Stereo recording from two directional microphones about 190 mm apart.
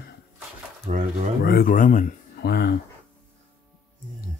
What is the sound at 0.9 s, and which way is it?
Speech, 35° right (ahead or behind).